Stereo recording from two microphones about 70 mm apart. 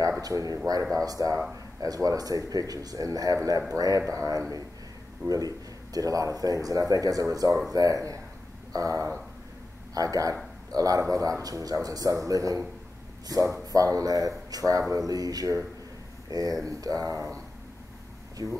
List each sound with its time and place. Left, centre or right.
0.2 s speech: right
5.2 s a man's voice: right
5.9 s speech: right
18.4 s speech: right